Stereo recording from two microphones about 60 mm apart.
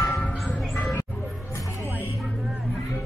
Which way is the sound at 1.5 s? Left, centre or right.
Left.